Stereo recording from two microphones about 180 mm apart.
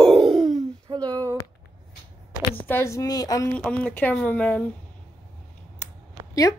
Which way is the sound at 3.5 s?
10° left (ahead or behind).